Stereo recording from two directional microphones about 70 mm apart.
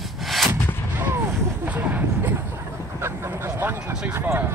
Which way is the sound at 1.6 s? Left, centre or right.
Right.